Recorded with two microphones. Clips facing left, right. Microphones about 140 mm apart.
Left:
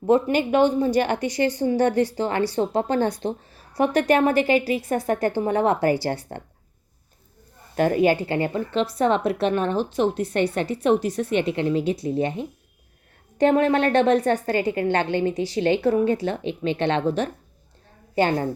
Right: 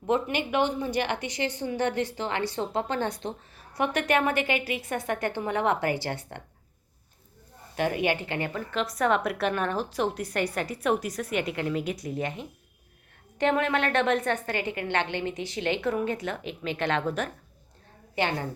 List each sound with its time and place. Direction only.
0.0 s a woman's voice: 40° left (ahead or behind)
7.8 s a woman's voice: 40° left (ahead or behind)
18.1 s a woman's voice: 45° left (ahead or behind)